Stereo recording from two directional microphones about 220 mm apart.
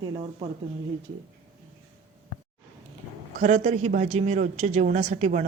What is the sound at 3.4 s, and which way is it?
A woman's voice, 30° right (ahead or behind).